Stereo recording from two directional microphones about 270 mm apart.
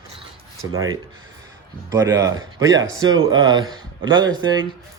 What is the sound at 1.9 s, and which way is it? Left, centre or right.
Speech, centre.